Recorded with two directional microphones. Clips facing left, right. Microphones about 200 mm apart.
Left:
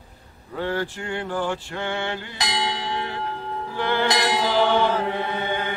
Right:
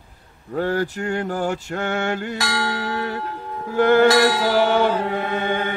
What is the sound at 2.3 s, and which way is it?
Church bell, 20° left (ahead or behind).